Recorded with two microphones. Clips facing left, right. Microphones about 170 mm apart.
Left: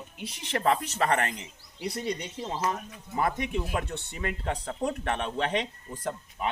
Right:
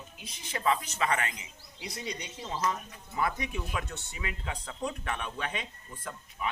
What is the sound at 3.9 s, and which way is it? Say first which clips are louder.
Speech: left 6 dB; 55° left (ahead or behind).